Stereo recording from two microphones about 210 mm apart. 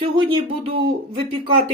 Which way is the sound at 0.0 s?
25° right (ahead or behind).